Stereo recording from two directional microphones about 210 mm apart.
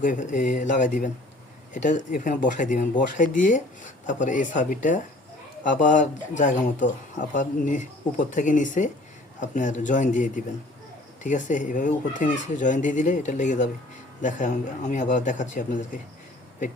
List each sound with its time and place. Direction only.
0.0 s speech: 35° left (ahead or behind)